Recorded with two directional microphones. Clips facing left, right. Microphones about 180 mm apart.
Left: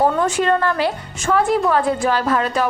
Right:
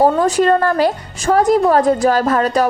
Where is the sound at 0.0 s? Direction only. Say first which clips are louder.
Right 4 dB; 40° right (ahead or behind).